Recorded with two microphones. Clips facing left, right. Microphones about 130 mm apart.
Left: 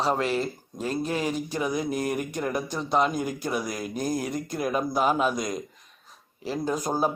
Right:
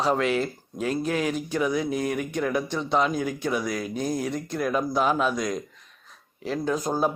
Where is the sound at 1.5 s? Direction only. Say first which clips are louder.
Right 2 dB; 40° left (ahead or behind).